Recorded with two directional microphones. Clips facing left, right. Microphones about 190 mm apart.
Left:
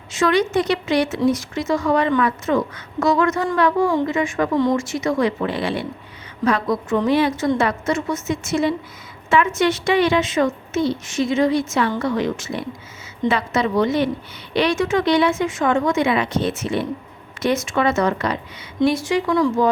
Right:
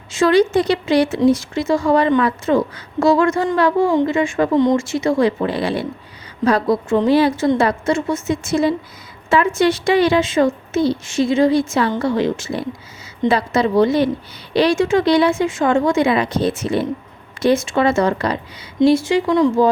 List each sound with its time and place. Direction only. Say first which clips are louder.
0.1 s a woman's voice: right 4 dB; 30° right (ahead or behind)